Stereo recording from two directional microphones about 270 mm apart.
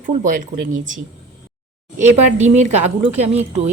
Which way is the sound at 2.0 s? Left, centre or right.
Right.